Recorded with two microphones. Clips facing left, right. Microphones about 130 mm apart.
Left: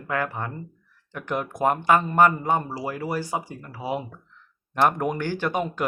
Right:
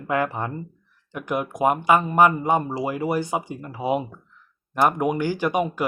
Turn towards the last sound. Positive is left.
turn(degrees=-10)  # may be behind; listen again after turning